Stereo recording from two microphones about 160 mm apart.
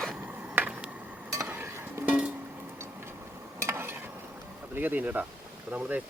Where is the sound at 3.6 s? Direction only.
15° right (ahead or behind).